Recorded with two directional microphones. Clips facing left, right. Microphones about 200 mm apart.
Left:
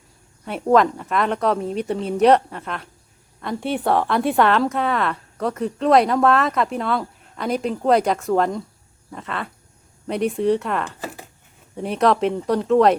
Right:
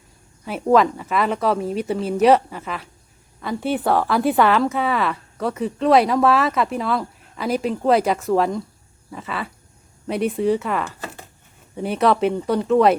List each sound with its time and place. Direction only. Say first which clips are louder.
0.4 s a woman's voice: even; centre (ahead or behind)
9.0 s dog: right 1 dB; centre (ahead or behind)
10.1 s a woman's voice: even; centre (ahead or behind)